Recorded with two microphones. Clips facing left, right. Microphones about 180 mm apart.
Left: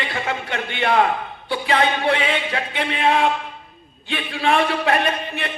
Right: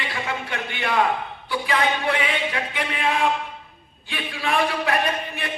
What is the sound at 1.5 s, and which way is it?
Speech, 30° left (ahead or behind).